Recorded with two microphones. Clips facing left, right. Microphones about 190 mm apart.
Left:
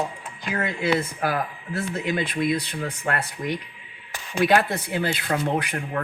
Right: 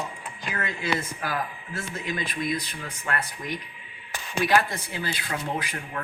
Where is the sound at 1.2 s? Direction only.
60° left (ahead or behind).